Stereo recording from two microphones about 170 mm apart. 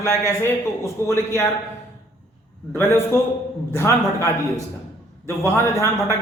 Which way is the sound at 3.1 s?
15° left (ahead or behind).